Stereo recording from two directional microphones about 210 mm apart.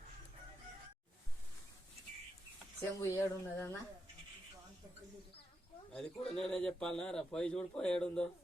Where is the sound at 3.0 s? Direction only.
10° left (ahead or behind).